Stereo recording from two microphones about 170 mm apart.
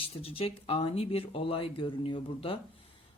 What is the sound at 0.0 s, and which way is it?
Speech, 35° left (ahead or behind).